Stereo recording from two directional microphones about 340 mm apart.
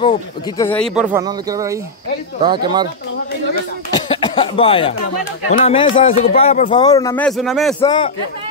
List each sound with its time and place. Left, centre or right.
0.0 s speech: centre
0.9 s speech: centre
3.9 s cough: centre
5.5 s speech: centre
7.8 s speech: centre